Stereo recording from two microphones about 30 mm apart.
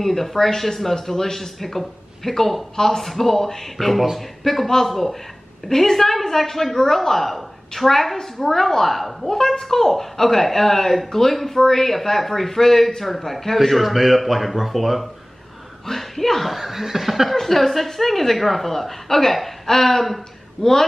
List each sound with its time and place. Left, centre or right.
0.0 s a woman's voice: centre
15.9 s speech: centre
17.4 s a woman's voice: centre
20.6 s a woman's voice: left